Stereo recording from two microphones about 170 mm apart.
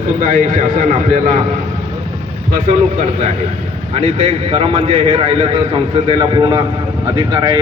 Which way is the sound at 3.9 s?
40° right (ahead or behind).